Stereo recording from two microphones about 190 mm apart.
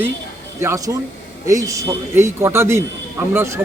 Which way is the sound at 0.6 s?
15° right (ahead or behind).